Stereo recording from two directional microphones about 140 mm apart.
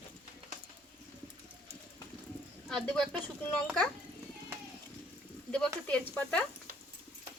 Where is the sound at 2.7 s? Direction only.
5° left (ahead or behind).